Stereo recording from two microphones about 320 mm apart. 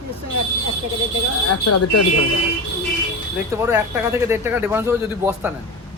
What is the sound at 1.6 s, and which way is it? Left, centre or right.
Speech, left.